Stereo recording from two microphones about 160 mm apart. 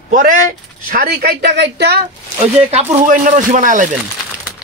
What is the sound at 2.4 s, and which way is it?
Speech, 40° right (ahead or behind).